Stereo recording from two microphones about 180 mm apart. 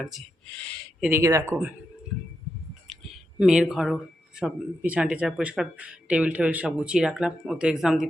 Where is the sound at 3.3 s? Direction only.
5° right (ahead or behind).